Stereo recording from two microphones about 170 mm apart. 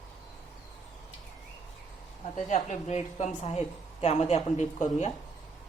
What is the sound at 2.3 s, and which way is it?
A woman's voice, 45° left (ahead or behind).